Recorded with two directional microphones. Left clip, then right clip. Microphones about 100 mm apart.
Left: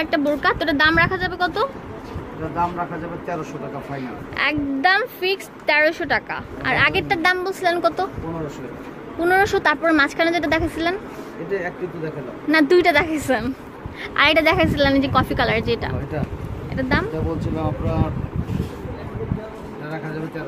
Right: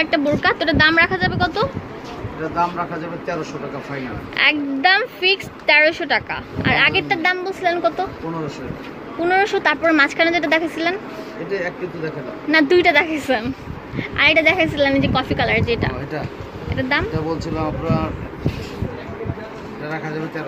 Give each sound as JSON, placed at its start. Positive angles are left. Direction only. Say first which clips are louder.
{"t": 0.0, "sound": "a woman's voice", "louder": "right 2 dB", "side_deg": 5}
{"t": 4.4, "sound": "a woman's voice", "louder": "right 4 dB", "side_deg": 5}
{"t": 9.2, "sound": "a woman's voice", "louder": "even", "side_deg": 25}
{"t": 9.8, "sound": "a woman's voice", "louder": "right 2 dB", "side_deg": 5}
{"t": 13.9, "sound": "a woman's voice", "louder": "right 1 dB", "side_deg": 30}